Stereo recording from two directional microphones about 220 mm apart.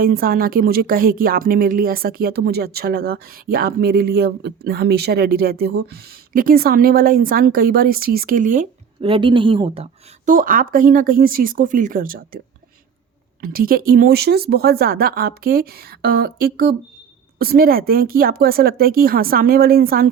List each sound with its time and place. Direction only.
0.0 s speech: 40° right (ahead or behind)
9.0 s speech: 25° right (ahead or behind); by 12.4 s 40° right (ahead or behind)
13.4 s speech: 40° right (ahead or behind)